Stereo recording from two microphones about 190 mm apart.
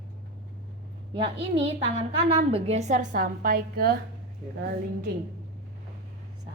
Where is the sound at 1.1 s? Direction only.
30° right (ahead or behind); by 3.9 s 50° right (ahead or behind).